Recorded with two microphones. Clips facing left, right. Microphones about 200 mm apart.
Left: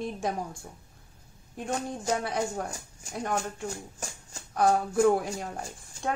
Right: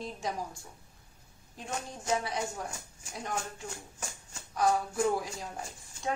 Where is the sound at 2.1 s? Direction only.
55° left (ahead or behind).